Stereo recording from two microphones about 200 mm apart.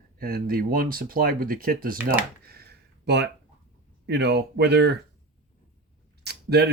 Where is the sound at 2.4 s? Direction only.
50° right (ahead or behind).